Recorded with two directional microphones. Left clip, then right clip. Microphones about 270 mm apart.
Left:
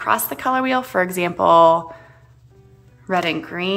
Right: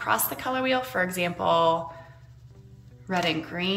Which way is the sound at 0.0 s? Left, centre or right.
Centre.